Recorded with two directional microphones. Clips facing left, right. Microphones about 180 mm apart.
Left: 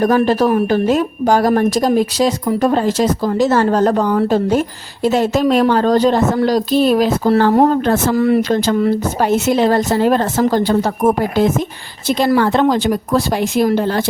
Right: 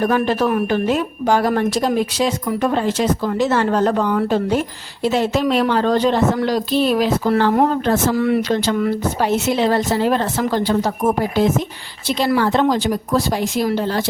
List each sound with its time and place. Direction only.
0.0 s a woman's voice: 40° left (ahead or behind)
7.9 s a woman's voice: 55° left (ahead or behind)